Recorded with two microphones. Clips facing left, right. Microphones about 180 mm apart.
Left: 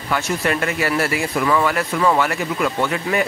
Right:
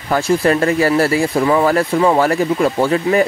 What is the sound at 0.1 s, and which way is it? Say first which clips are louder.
Speech: right 7 dB; 35° right (ahead or behind).